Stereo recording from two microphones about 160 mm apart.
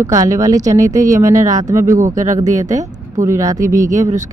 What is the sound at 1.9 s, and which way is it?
Speech, 50° right (ahead or behind).